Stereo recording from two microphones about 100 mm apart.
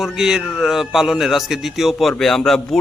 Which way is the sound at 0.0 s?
5° right (ahead or behind).